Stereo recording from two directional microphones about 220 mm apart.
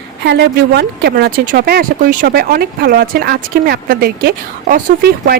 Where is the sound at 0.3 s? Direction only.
50° right (ahead or behind).